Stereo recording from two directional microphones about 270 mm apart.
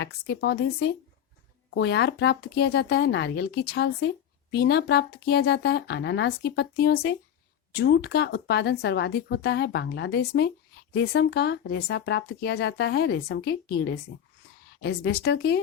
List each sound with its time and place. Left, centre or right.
0.0 s speech: left
14.8 s speech: left